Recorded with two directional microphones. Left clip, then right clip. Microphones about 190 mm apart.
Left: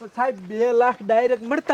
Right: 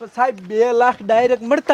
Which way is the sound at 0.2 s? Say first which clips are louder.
Right 5 dB; 60° right (ahead or behind).